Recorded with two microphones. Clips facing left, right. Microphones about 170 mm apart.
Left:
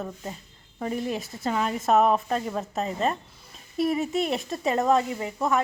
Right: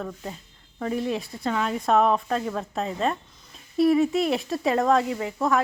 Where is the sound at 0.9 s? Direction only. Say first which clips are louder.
Right 4 dB; centre (ahead or behind).